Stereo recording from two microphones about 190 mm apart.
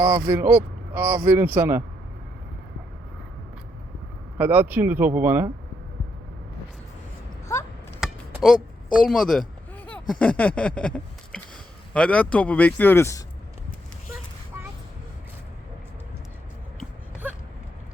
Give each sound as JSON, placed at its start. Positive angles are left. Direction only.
{"t": 0.3, "sound": "speech", "side_deg": -10}
{"t": 4.4, "sound": "speech", "side_deg": -10}
{"t": 7.5, "sound": "chop", "side_deg": 15}
{"t": 8.0, "sound": "a sound", "side_deg": 0}
{"t": 9.0, "sound": "speech", "side_deg": 0}
{"t": 17.2, "sound": "a sound", "side_deg": -10}